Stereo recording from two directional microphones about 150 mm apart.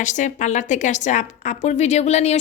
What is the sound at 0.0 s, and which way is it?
A woman's voice, 55° left (ahead or behind).